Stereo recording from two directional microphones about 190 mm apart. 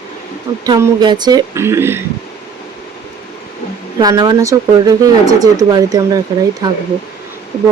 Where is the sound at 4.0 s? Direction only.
20° right (ahead or behind).